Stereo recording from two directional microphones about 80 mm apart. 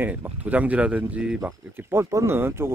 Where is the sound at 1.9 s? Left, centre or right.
Right.